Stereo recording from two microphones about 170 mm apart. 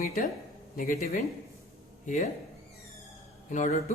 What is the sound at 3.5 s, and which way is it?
Speech, 45° left (ahead or behind).